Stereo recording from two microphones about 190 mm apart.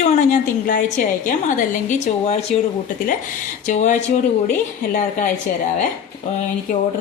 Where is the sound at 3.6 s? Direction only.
40° left (ahead or behind).